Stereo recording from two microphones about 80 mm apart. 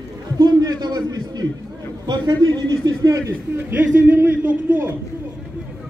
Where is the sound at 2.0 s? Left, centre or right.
Right.